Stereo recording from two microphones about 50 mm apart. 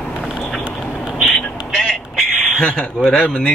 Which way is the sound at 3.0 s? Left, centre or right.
Centre.